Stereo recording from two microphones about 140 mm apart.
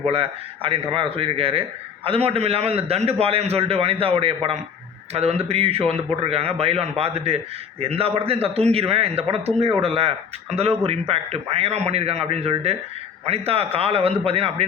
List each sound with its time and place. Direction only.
0.0 s a man's voice: 45° right (ahead or behind)